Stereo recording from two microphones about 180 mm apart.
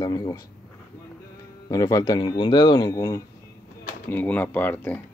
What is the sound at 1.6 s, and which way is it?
Speech, 20° left (ahead or behind).